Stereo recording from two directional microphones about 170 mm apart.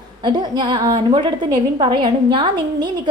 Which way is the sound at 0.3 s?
25° right (ahead or behind).